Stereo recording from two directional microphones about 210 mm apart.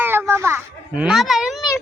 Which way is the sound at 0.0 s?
10° right (ahead or behind).